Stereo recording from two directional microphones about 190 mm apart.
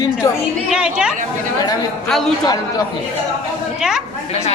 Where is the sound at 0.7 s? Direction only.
5° right (ahead or behind).